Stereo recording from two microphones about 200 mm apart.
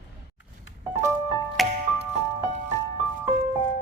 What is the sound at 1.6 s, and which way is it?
Music, centre (ahead or behind).